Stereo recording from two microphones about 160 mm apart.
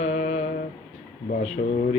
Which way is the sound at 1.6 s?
55° left (ahead or behind).